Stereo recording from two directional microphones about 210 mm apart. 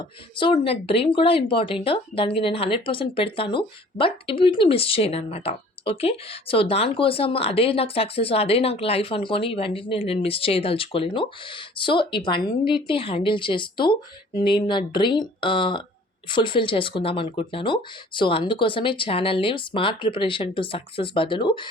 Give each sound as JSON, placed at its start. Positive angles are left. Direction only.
{"t": 0.0, "sound": "speech", "side_deg": 25}